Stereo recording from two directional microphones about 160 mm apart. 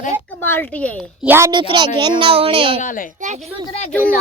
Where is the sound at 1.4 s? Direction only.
30° right (ahead or behind).